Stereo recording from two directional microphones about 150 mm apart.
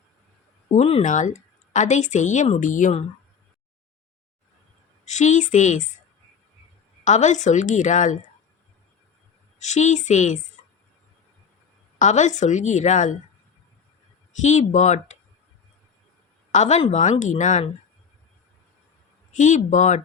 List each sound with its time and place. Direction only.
0.7 s speech: 45° left (ahead or behind)
1.0 s speech: 55° left (ahead or behind)
5.0 s a woman's voice: 55° left (ahead or behind)
7.0 s a woman's voice: 55° left (ahead or behind)
9.6 s speech: 50° left (ahead or behind)
11.9 s speech: 55° left (ahead or behind)
14.4 s speech: 55° left (ahead or behind)
16.5 s speech: 50° left (ahead or behind)
19.4 s speech: 55° left (ahead or behind)